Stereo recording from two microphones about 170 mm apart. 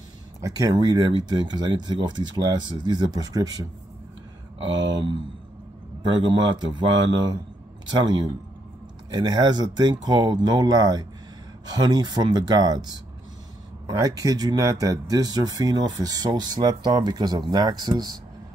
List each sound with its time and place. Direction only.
0.4 s speech: 20° right (ahead or behind)